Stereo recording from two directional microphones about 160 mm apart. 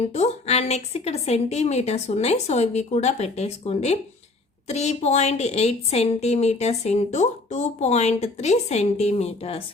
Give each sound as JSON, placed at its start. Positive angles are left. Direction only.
{"t": 0.1, "sound": "a woman's voice", "side_deg": 45}